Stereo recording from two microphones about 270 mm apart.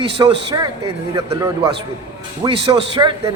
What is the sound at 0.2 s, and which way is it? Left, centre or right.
Speech, centre.